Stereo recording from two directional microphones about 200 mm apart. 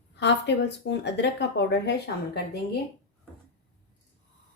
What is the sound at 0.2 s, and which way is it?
Speech, 60° left (ahead or behind).